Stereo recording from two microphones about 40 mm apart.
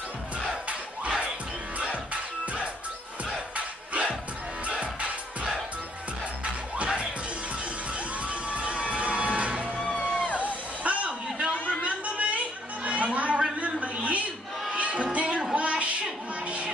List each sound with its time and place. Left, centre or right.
3.3 s battle cry: right
4.6 s music: right
8.3 s crowd: right
9.8 s music: left
10.4 s a sound: right
11.8 s chatter: right
13.6 s a sound: right
14.7 s music: right
15.5 s a sound: right